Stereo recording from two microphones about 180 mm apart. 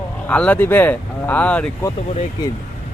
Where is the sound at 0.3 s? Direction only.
5° left (ahead or behind).